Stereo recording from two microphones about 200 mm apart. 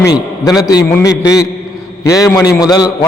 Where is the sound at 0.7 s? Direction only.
15° left (ahead or behind).